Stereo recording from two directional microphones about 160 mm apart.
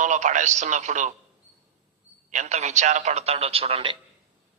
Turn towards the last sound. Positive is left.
turn(degrees=-35)  # may be behind; listen again after turning